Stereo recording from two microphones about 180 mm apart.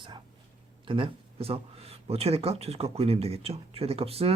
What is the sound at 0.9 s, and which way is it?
Speech, 30° right (ahead or behind).